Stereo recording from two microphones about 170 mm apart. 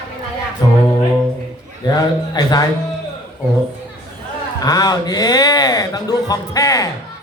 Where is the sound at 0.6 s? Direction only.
25° left (ahead or behind).